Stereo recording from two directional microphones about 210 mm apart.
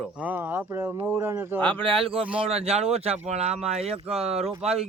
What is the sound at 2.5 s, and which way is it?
Speech, 30° right (ahead or behind).